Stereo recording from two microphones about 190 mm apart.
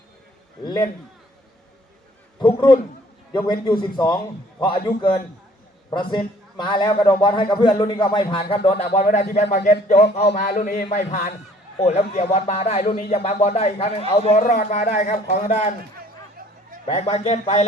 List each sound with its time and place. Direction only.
0.6 s a man's voice: 20° left (ahead or behind)
2.4 s a man's voice: 25° left (ahead or behind)
16.8 s speech: 35° left (ahead or behind)